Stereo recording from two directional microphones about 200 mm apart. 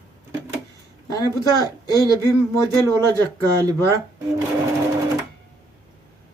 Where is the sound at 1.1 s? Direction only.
20° left (ahead or behind).